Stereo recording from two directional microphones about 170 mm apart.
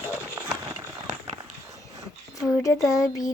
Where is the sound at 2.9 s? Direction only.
20° left (ahead or behind).